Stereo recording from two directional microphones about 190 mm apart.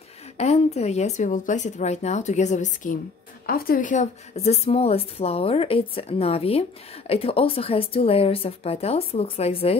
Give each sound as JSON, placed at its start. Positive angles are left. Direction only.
{"t": 0.4, "sound": "a woman's voice", "side_deg": 35}